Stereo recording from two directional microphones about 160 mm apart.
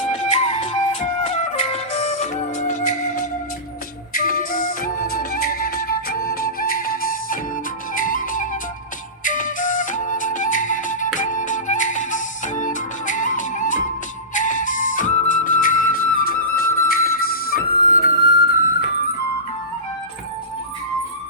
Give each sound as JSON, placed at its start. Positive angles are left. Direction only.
{"t": 0.0, "sound": "music", "side_deg": 45}
{"t": 4.1, "sound": "flute", "side_deg": 60}
{"t": 9.2, "sound": "music", "side_deg": 55}
{"t": 14.3, "sound": "flute", "side_deg": 55}